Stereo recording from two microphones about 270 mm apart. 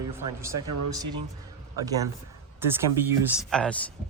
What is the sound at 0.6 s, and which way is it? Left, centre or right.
Speech, right.